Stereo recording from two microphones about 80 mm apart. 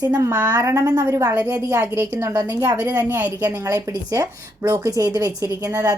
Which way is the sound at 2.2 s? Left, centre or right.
Right.